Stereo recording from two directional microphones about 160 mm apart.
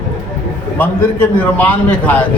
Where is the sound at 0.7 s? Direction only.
10° left (ahead or behind).